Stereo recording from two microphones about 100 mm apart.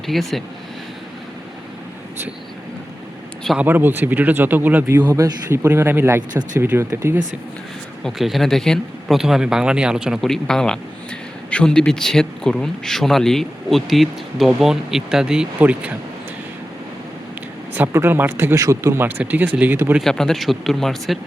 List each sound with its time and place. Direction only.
0.1 s speech: centre (ahead or behind)
3.6 s speech: 20° right (ahead or behind)
5.1 s speech: 35° right (ahead or behind)
5.6 s speech: 25° right (ahead or behind)
8.0 s speech: centre (ahead or behind)
17.9 s speech: 20° right (ahead or behind)
18.5 s speech: 30° right (ahead or behind)
19.0 s speech: 15° right (ahead or behind)
20.0 s speech: 5° left (ahead or behind)